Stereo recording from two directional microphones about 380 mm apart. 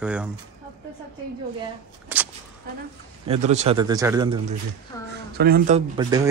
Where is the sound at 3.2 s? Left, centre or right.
Centre.